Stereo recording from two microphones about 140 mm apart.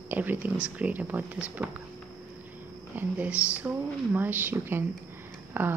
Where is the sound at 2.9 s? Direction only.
10° right (ahead or behind).